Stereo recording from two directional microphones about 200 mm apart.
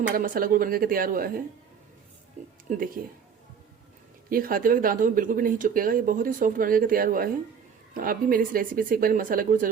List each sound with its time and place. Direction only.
0.1 s speech: 45° right (ahead or behind)
2.6 s speech: 45° right (ahead or behind)
4.3 s speech: 45° right (ahead or behind)